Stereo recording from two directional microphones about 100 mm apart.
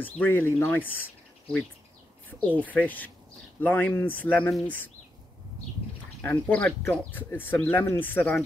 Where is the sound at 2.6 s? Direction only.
15° left (ahead or behind).